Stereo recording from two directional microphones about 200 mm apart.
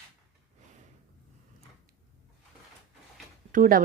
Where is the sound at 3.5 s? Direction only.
45° right (ahead or behind).